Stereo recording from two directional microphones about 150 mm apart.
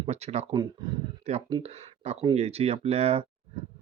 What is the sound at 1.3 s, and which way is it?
Speech, 45° right (ahead or behind).